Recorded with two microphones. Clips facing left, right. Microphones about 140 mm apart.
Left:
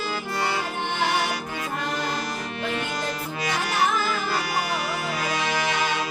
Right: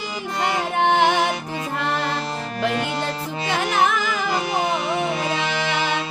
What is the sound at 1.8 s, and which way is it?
Music, 70° right (ahead or behind).